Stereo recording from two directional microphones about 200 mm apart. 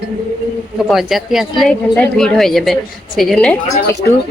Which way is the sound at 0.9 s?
Centre (ahead or behind).